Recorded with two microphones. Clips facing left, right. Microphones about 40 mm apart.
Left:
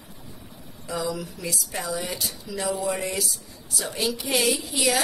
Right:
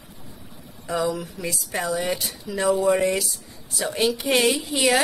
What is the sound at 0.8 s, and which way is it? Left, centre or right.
A woman's voice, right.